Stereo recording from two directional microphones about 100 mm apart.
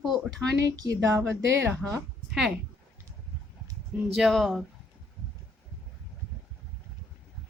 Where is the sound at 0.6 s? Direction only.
35° right (ahead or behind).